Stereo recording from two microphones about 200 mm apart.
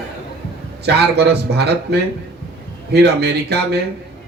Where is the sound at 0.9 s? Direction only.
55° right (ahead or behind).